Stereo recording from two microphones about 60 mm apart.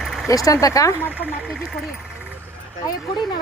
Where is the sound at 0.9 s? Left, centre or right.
Left.